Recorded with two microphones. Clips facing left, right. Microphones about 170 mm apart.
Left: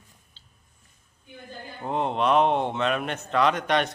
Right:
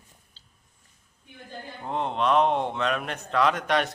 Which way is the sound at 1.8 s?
5° left (ahead or behind).